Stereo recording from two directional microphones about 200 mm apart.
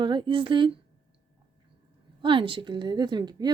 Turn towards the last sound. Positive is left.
turn(degrees=-20)  # may be behind; listen again after turning